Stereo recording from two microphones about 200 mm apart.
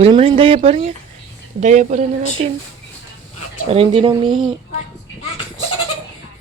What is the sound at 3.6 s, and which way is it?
Speech, 30° right (ahead or behind).